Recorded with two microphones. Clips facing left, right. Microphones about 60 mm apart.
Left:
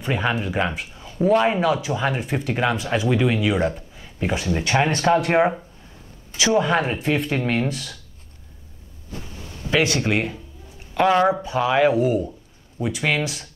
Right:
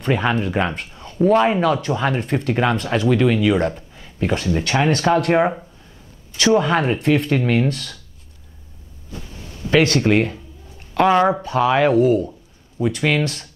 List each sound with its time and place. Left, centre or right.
0.0 s speech: centre
4.8 s speech: centre
9.6 s a sound: centre
11.1 s speech: centre
11.4 s speech: centre
11.9 s speech: centre
12.3 s a sound: centre
12.9 s speech: centre